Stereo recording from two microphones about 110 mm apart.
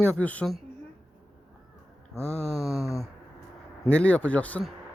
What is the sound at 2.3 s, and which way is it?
Speech, centre (ahead or behind).